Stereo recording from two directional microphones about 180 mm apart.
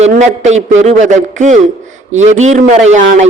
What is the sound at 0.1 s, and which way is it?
A man's voice, 40° right (ahead or behind).